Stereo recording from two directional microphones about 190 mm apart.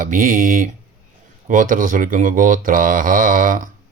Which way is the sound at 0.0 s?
45° right (ahead or behind).